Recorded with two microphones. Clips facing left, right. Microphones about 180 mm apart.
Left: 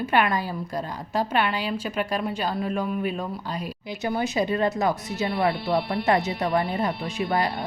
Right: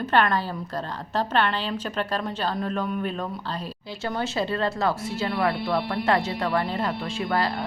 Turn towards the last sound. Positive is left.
turn(degrees=20)  # may be behind; listen again after turning